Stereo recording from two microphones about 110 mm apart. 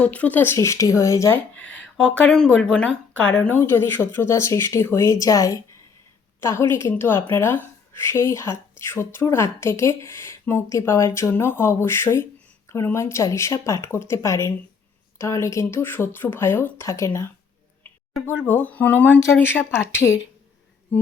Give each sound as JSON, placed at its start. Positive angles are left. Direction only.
{"t": 0.0, "sound": "speech", "side_deg": 15}
{"t": 1.5, "sound": "speech", "side_deg": 10}
{"t": 18.4, "sound": "speech", "side_deg": 15}